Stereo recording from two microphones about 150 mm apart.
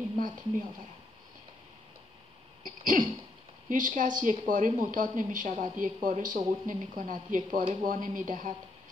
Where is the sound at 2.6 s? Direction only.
65° right (ahead or behind).